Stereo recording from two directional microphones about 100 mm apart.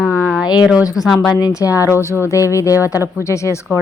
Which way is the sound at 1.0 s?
Centre (ahead or behind).